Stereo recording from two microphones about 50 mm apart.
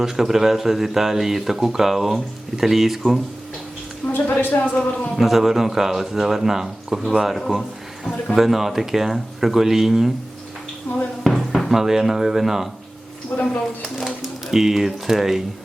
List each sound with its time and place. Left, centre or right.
0.0 s speech: centre
4.3 s speech: left
5.1 s speech: centre
10.9 s speech: left
11.2 s music: centre
11.7 s speech: centre
13.3 s speech: centre
14.4 s speech: centre